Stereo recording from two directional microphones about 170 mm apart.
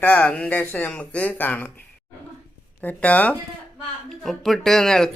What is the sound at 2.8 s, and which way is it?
Speech, 10° left (ahead or behind).